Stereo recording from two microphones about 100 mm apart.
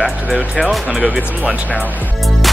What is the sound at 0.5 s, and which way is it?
Speech, 10° left (ahead or behind).